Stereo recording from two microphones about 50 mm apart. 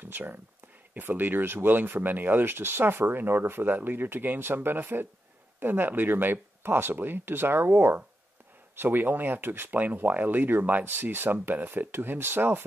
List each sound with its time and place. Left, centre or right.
0.0 s speech: right